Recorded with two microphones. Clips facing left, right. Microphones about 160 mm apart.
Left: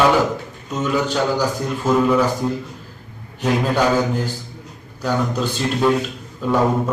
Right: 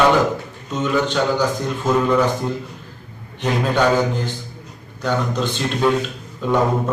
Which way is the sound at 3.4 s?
5° left (ahead or behind).